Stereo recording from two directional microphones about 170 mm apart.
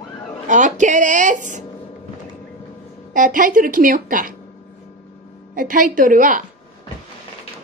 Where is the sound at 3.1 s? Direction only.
50° right (ahead or behind).